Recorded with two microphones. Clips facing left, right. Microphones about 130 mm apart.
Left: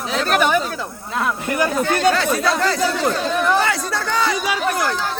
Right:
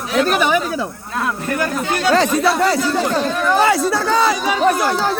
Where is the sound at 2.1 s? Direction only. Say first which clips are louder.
Right 5 dB; 35° right (ahead or behind).